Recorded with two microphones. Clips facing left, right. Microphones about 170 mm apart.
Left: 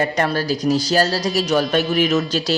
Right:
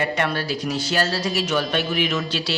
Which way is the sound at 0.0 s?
40° left (ahead or behind).